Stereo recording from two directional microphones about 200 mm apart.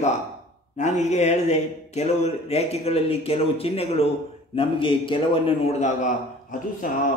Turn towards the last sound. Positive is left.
turn(degrees=40)  # may be behind; listen again after turning